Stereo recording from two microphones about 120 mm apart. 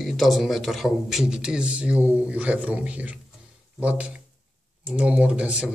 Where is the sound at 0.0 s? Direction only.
Centre (ahead or behind).